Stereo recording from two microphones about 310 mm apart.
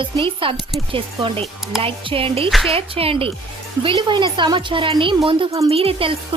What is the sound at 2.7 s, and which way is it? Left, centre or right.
Speech, centre.